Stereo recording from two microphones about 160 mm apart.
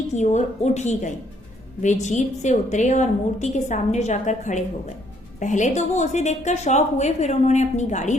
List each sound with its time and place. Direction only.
0.1 s a woman's voice: 45° left (ahead or behind)